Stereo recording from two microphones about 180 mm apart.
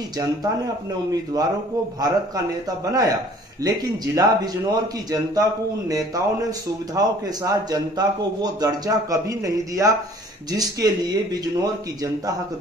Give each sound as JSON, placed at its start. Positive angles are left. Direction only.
{"t": 2.0, "sound": "a man's voice", "side_deg": -20}